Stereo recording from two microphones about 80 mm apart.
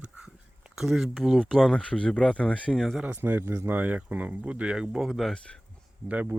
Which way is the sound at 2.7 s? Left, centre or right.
Centre.